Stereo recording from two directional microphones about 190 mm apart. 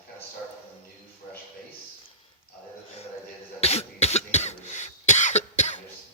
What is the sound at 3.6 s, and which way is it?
Cough, 35° left (ahead or behind).